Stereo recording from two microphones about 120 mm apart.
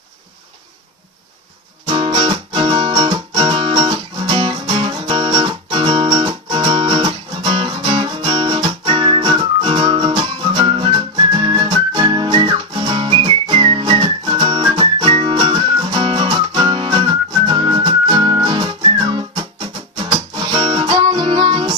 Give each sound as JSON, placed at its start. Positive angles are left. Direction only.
{"t": 1.9, "sound": "music", "side_deg": -45}